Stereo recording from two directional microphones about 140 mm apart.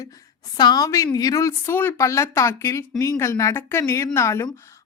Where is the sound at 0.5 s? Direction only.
30° left (ahead or behind).